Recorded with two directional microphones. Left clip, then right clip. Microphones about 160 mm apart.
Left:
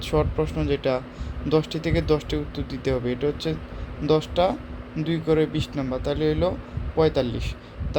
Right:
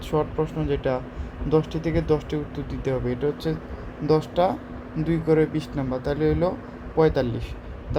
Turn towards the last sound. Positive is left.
turn(degrees=5)  # may be behind; listen again after turning